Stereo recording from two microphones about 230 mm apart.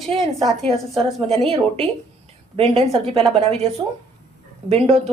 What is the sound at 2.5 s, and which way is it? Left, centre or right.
A woman's voice, right.